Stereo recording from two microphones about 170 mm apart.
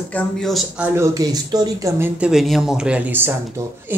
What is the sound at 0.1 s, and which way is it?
Speech, centre (ahead or behind).